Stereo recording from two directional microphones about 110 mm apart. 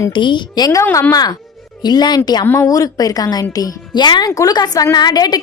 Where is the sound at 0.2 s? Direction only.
45° left (ahead or behind).